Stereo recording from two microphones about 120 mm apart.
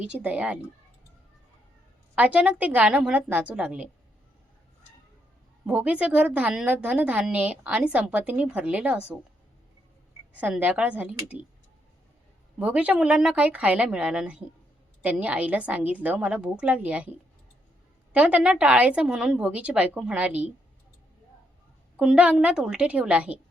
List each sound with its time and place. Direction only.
0.0 s a woman's voice: 15° right (ahead or behind)
2.1 s a woman's voice: 10° right (ahead or behind)
5.6 s a woman's voice: 10° right (ahead or behind)
10.3 s a woman's voice: 10° right (ahead or behind)
12.5 s a woman's voice: 10° right (ahead or behind)
21.9 s a woman's voice: 10° right (ahead or behind)